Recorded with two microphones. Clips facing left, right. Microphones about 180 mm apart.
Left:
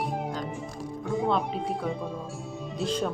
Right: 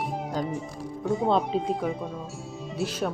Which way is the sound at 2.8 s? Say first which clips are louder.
Even; 10° right (ahead or behind).